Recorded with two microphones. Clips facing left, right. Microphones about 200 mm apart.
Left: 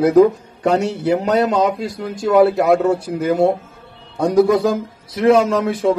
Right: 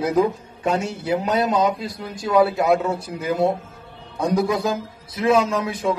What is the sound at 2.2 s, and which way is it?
Speech, 50° left (ahead or behind).